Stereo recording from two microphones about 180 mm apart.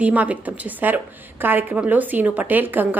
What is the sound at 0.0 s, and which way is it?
A woman's voice, 10° right (ahead or behind).